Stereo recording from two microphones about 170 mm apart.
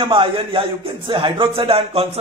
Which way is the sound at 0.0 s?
30° right (ahead or behind).